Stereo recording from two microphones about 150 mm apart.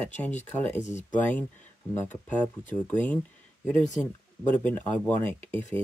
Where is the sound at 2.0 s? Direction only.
10° left (ahead or behind).